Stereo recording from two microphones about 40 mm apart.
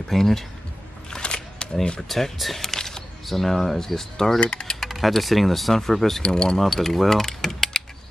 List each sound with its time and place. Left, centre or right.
0.1 s speech: centre
1.1 s single-lens reflex camera: left
2.0 s speech: centre
4.4 s speech: left
4.7 s speech: centre
6.2 s speech: left
6.6 s mechanisms: centre